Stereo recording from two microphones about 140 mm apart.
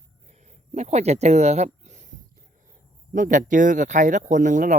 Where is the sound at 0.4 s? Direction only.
55° right (ahead or behind).